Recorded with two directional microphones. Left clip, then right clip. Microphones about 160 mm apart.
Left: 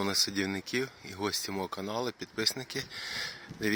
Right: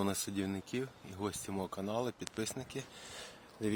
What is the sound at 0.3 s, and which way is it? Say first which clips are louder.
Speech: left 7 dB; 10° left (ahead or behind).